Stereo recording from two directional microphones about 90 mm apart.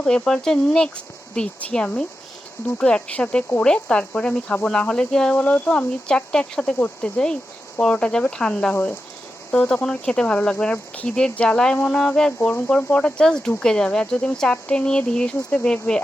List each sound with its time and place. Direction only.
0.0 s speech: 10° left (ahead or behind)
12.4 s speech: 20° left (ahead or behind)